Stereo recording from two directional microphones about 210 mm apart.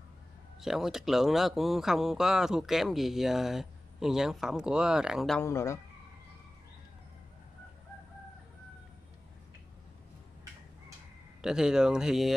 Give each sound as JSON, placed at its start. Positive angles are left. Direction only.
{"t": 0.6, "sound": "speech", "side_deg": 0}
{"t": 5.4, "sound": "speech", "side_deg": 15}
{"t": 11.4, "sound": "speech", "side_deg": -5}